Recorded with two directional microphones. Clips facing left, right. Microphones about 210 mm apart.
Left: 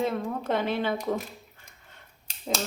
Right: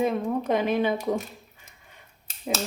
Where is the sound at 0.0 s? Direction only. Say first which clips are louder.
Right 4 dB; 15° right (ahead or behind).